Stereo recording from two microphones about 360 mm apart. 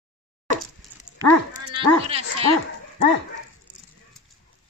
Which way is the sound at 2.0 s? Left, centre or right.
Centre.